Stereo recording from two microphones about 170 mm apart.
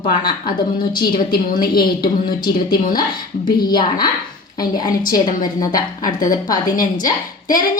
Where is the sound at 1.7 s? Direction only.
25° left (ahead or behind).